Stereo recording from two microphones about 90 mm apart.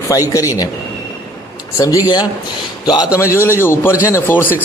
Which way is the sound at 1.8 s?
40° left (ahead or behind).